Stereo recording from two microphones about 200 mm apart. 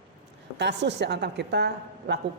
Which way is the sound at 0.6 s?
60° right (ahead or behind).